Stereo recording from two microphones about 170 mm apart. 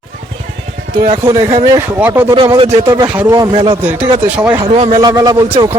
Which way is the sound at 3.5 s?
30° right (ahead or behind).